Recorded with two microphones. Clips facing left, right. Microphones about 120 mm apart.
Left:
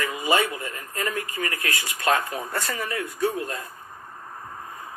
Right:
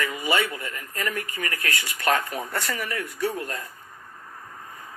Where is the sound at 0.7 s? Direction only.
25° left (ahead or behind).